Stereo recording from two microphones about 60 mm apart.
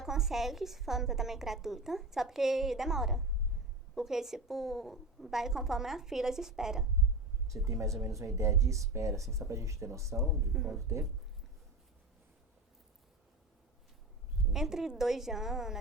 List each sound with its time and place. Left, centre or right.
0.0 s a woman's voice: centre
7.6 s speech: right
10.2 s a woman's voice: centre
14.5 s a woman's voice: centre